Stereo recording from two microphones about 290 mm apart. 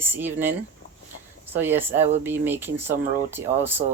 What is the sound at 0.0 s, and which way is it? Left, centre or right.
Speech, centre.